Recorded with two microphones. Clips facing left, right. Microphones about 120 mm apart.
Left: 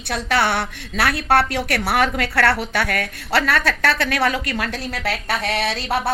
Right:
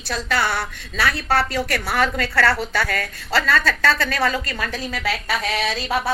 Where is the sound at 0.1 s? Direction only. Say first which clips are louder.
Left 3 dB; 65° left (ahead or behind).